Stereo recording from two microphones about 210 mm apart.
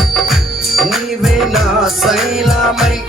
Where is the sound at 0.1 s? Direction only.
Centre (ahead or behind).